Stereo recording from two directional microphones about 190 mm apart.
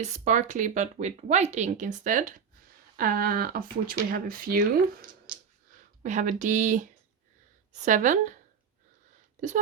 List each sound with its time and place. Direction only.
0.0 s speech: 40° right (ahead or behind)
5.7 s speech: 40° right (ahead or behind)